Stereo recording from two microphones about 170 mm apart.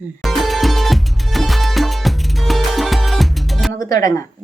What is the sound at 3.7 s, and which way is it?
Speech, 20° left (ahead or behind).